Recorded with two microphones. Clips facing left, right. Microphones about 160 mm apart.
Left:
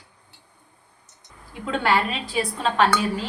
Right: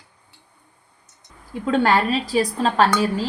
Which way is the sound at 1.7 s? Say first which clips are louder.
Right 4 dB; 40° right (ahead or behind).